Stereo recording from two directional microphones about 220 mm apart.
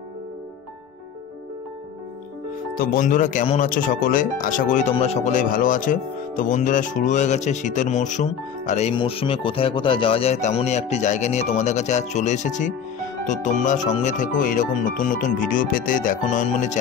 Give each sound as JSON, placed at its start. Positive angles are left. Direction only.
{"t": 2.8, "sound": "speech", "side_deg": 40}